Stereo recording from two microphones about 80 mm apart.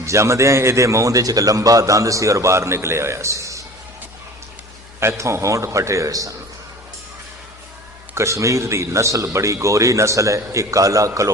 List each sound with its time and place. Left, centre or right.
0.0 s a man's voice: right
4.9 s a man's voice: right
8.1 s a man's voice: right